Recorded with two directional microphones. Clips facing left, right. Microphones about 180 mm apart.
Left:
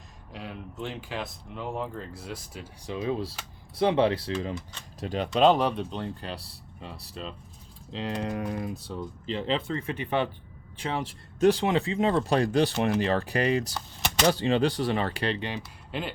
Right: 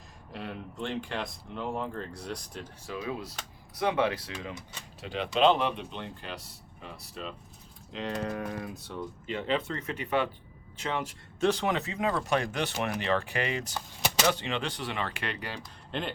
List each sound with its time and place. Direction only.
0.3 s speech: centre (ahead or behind)
2.8 s speech: 25° left (ahead or behind)
4.9 s speech: 40° left (ahead or behind); by 15.6 s 20° left (ahead or behind)
15.9 s speech: 5° left (ahead or behind)